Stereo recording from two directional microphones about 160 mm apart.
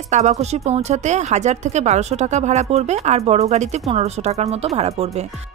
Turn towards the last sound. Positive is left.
turn(degrees=-40)  # may be behind; listen again after turning